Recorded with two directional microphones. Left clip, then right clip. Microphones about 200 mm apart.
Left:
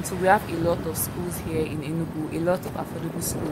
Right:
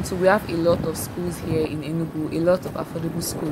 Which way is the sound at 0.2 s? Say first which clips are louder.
Right 2 dB; 5° right (ahead or behind).